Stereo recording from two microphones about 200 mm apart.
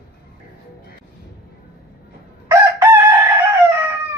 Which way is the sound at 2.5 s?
15° right (ahead or behind).